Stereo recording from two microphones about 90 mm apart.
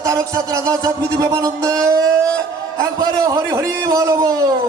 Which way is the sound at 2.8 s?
40° right (ahead or behind).